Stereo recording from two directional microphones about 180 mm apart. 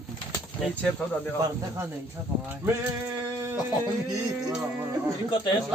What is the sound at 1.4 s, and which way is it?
Speech, 15° right (ahead or behind).